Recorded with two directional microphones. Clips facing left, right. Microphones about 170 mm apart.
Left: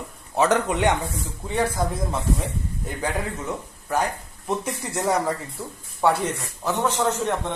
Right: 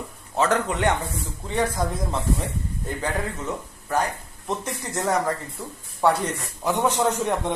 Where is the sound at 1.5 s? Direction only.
5° left (ahead or behind).